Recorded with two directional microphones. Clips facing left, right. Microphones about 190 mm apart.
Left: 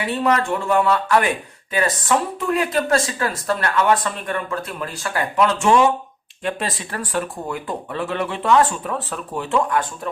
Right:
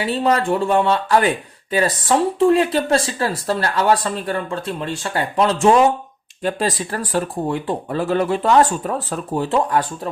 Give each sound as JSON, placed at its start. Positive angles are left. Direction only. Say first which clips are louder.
{"t": 0.0, "sound": "speech", "louder": "right 2 dB", "side_deg": -30}